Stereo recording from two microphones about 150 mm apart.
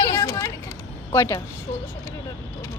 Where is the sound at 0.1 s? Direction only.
20° left (ahead or behind).